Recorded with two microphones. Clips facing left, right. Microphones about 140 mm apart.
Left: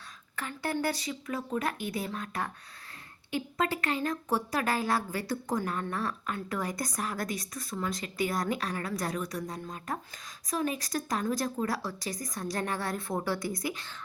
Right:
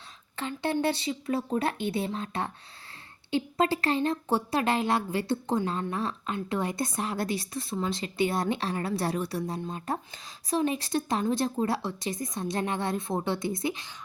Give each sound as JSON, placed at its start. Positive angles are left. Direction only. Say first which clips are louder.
{"t": 0.3, "sound": "a woman's voice", "louder": "right 4 dB", "side_deg": -25}